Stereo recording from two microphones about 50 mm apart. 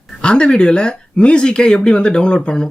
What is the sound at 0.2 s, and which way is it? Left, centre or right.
Speech, centre.